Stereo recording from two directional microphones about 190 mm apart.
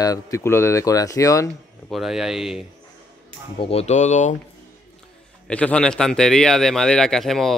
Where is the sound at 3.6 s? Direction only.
35° left (ahead or behind).